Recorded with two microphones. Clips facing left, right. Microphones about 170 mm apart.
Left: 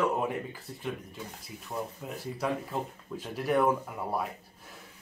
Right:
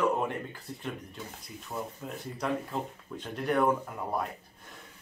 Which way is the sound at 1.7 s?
Centre (ahead or behind).